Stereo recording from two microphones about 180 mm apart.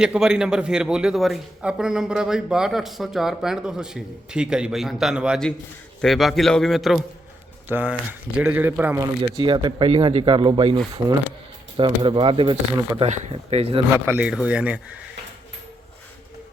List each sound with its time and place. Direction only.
0.0 s a man's voice: 5° right (ahead or behind)
9.4 s speech: 25° right (ahead or behind)
13.9 s speech: 10° right (ahead or behind)